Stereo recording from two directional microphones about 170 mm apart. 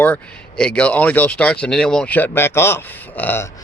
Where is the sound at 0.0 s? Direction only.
10° left (ahead or behind).